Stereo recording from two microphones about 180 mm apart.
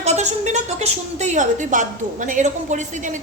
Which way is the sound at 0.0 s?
40° right (ahead or behind).